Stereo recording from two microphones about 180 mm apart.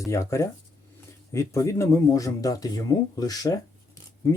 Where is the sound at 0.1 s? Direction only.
15° left (ahead or behind).